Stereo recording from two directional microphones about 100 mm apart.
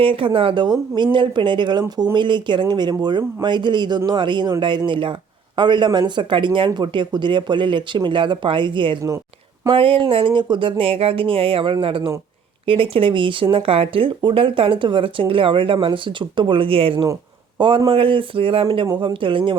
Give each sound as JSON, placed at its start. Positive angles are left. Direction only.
{"t": 0.0, "sound": "speech", "side_deg": -60}